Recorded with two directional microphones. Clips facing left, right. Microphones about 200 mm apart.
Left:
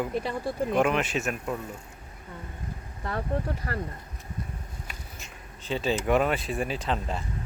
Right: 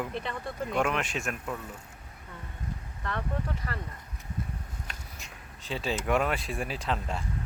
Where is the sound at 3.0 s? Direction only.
35° left (ahead or behind).